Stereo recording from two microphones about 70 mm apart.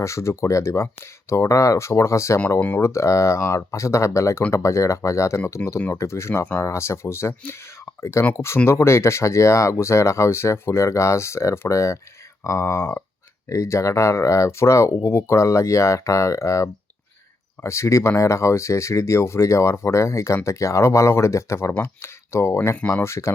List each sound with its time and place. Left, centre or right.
0.0 s speech: left
2.6 s speech: left
2.8 s speech: left